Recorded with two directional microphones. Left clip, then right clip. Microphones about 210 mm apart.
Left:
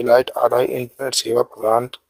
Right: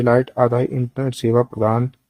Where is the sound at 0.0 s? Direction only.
30° left (ahead or behind).